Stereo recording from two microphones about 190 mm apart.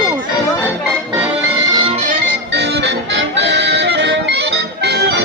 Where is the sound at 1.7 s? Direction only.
25° right (ahead or behind).